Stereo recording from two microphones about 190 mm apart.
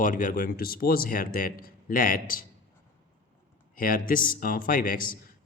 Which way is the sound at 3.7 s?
50° left (ahead or behind).